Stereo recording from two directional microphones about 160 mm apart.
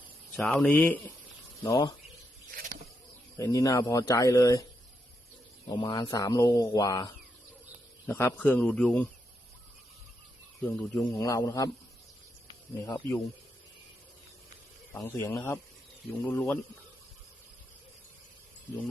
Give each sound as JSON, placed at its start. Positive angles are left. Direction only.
{"t": 0.3, "sound": "speech", "side_deg": 5}
{"t": 1.6, "sound": "speech", "side_deg": 20}
{"t": 3.3, "sound": "speech", "side_deg": 20}
{"t": 5.6, "sound": "a man's voice", "side_deg": 30}
{"t": 10.6, "sound": "a man's voice", "side_deg": 10}
{"t": 12.8, "sound": "speech", "side_deg": 20}
{"t": 14.9, "sound": "a man's voice", "side_deg": 15}